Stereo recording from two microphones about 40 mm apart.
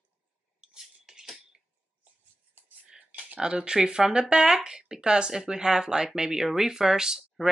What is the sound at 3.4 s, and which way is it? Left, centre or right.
Speech, right.